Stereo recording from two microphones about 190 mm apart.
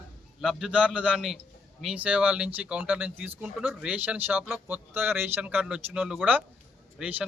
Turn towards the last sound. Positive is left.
turn(degrees=-5)  # may be behind; listen again after turning